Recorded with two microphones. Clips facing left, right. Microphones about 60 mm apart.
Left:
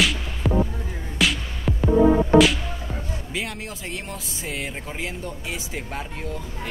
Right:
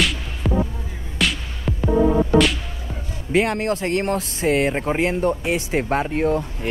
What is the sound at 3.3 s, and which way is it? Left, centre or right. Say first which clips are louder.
Speech: right 14 dB; right.